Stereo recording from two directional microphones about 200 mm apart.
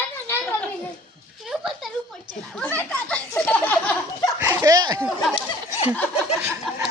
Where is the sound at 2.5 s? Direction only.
10° left (ahead or behind).